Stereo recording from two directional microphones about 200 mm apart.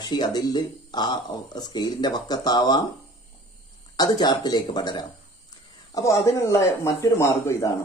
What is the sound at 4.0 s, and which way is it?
Speech, 20° left (ahead or behind).